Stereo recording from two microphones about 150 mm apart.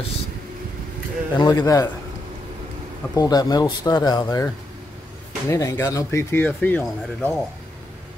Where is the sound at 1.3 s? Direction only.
25° left (ahead or behind).